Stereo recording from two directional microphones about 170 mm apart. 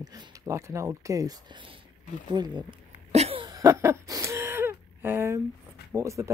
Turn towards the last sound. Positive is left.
turn(degrees=-20)  # may be behind; listen again after turning